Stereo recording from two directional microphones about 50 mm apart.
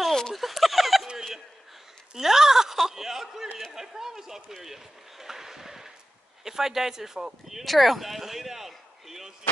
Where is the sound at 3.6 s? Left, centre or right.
Centre.